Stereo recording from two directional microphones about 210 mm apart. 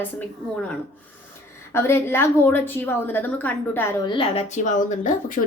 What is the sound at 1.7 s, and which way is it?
A woman's voice, 10° left (ahead or behind).